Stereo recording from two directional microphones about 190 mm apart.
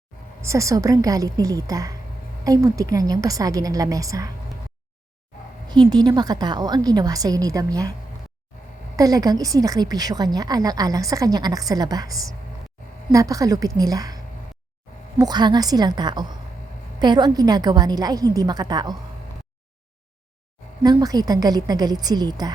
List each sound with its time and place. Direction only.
0.4 s a woman's voice: 15° right (ahead or behind)
5.7 s a woman's voice: 20° right (ahead or behind)
9.0 s a woman's voice: 20° right (ahead or behind)
15.2 s a woman's voice: 20° right (ahead or behind)
20.8 s a woman's voice: 20° right (ahead or behind)